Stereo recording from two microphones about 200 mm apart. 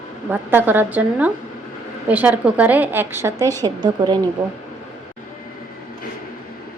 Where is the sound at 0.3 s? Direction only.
10° right (ahead or behind).